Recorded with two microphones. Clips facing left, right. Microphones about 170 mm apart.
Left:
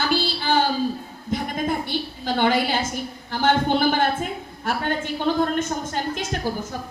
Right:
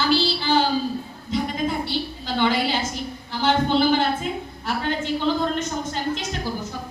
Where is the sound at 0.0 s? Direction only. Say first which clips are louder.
Right 2 dB; 50° left (ahead or behind).